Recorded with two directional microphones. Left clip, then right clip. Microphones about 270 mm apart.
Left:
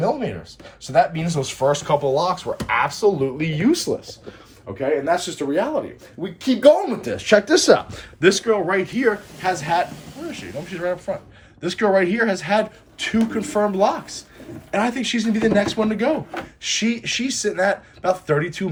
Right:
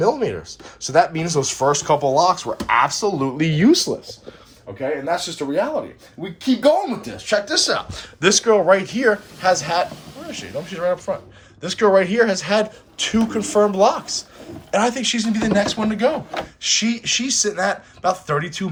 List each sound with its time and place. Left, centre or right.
0.0 s speech: centre
3.3 s speech: right
4.8 s speech: centre
7.3 s speech: left
7.8 s speech: centre
8.3 s speech: centre